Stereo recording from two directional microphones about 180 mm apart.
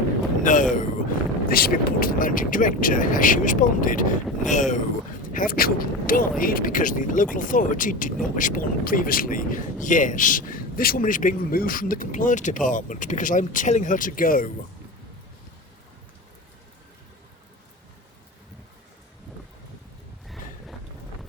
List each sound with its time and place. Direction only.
0.4 s speech: 45° left (ahead or behind)
1.5 s speech: 55° left (ahead or behind)
20.2 s vehicle: centre (ahead or behind)